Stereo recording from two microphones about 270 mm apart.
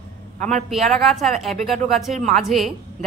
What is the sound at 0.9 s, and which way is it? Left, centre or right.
A woman's voice, centre.